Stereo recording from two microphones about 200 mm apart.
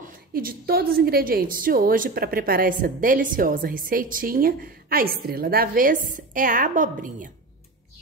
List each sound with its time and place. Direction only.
0.0 s a woman's voice: 45° right (ahead or behind)